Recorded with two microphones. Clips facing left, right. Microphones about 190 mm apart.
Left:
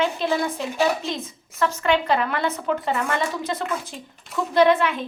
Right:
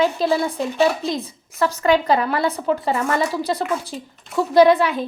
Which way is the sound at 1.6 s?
35° right (ahead or behind).